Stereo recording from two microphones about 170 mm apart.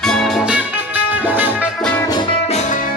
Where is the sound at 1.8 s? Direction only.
5° left (ahead or behind).